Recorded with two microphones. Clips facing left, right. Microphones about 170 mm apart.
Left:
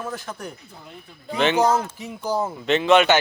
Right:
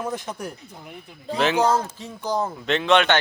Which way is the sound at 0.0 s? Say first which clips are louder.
Right 2 dB; 20° right (ahead or behind).